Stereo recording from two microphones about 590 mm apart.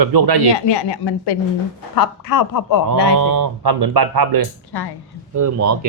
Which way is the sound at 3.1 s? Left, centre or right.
Right.